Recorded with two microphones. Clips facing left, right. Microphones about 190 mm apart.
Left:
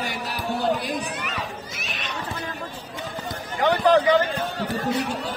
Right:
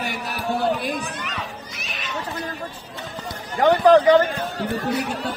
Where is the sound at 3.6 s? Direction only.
50° right (ahead or behind).